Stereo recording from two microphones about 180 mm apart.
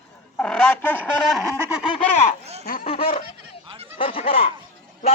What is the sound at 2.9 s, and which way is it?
Speech, 30° left (ahead or behind).